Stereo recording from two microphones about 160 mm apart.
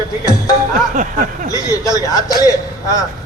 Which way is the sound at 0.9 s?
55° right (ahead or behind).